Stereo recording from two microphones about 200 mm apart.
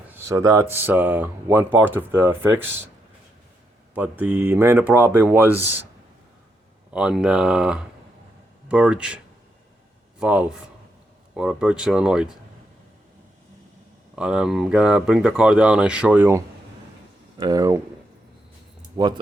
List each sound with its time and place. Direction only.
0.1 s speech: 15° right (ahead or behind)
3.9 s speech: 10° right (ahead or behind)
6.9 s speech: 5° right (ahead or behind)
14.2 s speech: 5° right (ahead or behind)
18.9 s speech: 20° right (ahead or behind)